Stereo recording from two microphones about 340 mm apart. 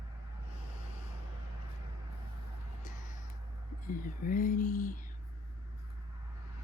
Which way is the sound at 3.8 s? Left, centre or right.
Left.